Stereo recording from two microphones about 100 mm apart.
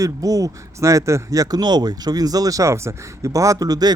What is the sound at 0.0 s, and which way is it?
Speech, 35° right (ahead or behind).